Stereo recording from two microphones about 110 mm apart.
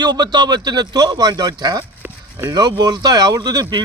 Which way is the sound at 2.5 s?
40° right (ahead or behind).